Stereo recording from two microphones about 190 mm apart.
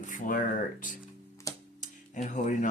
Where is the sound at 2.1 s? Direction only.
40° left (ahead or behind).